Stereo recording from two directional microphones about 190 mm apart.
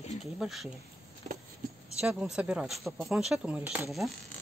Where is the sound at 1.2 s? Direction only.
40° right (ahead or behind).